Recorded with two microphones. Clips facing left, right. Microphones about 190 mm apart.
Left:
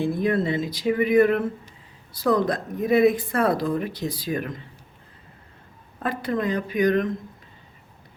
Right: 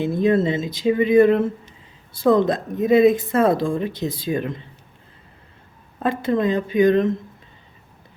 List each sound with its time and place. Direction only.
0.0 s speech: 25° right (ahead or behind)
6.0 s speech: 25° right (ahead or behind)